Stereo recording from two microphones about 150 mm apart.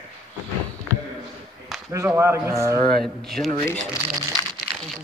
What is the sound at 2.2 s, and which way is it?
Speech, 20° right (ahead or behind).